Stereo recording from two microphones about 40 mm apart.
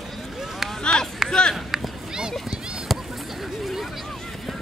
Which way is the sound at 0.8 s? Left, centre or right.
Centre.